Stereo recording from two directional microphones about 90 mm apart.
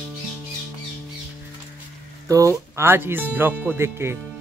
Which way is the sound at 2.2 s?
35° right (ahead or behind).